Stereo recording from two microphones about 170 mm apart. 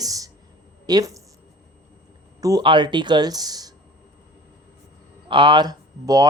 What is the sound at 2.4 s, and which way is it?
Speech, 20° right (ahead or behind).